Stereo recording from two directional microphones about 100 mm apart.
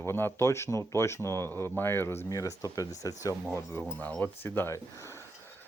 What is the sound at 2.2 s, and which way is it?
Speech, 35° left (ahead or behind).